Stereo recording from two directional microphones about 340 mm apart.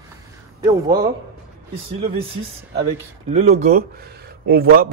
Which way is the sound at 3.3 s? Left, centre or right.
Centre.